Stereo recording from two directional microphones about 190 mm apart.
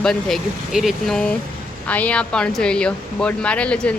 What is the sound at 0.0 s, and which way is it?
Speech, centre (ahead or behind).